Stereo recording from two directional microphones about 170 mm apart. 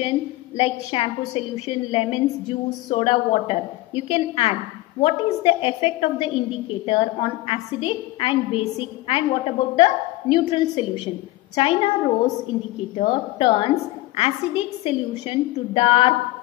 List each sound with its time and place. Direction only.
0.0 s a woman's voice: 30° left (ahead or behind)
12.9 s a woman's voice: 30° left (ahead or behind)